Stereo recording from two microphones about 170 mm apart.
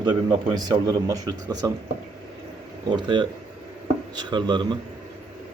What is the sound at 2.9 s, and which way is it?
A man's voice, 25° right (ahead or behind).